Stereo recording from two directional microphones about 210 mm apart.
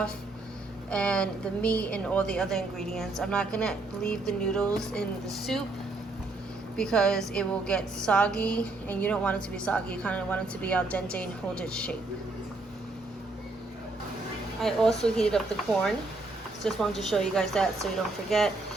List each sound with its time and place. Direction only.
0.9 s a woman's voice: 5° left (ahead or behind)
6.7 s a woman's voice: 5° left (ahead or behind)
14.6 s a woman's voice: centre (ahead or behind)
16.6 s a woman's voice: centre (ahead or behind)